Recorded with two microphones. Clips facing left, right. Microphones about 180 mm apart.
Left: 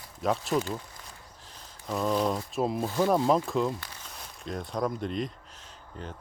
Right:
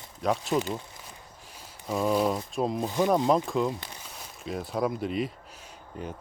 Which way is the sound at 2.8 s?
15° right (ahead or behind).